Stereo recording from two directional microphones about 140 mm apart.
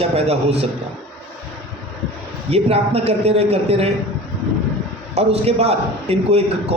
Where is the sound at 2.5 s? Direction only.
45° right (ahead or behind).